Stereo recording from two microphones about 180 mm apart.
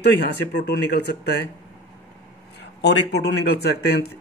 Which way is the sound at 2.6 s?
70° left (ahead or behind).